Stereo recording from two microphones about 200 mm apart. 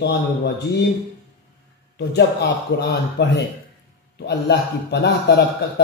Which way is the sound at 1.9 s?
55° left (ahead or behind).